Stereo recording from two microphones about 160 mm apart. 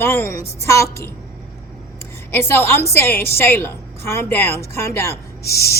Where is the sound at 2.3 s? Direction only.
15° left (ahead or behind).